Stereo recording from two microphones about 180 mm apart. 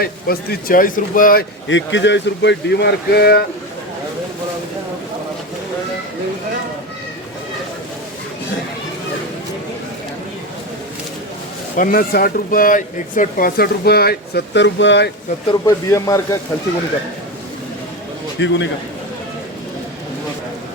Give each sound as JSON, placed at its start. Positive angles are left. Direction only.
{"t": 0.0, "sound": "speech", "side_deg": 60}
{"t": 1.6, "sound": "speech", "side_deg": 90}
{"t": 11.8, "sound": "speech", "side_deg": 55}
{"t": 15.4, "sound": "a man's voice", "side_deg": 20}
{"t": 18.3, "sound": "a man's voice", "side_deg": 90}